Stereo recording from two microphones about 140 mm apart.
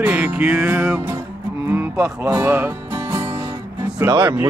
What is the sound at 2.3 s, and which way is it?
Music, 15° right (ahead or behind).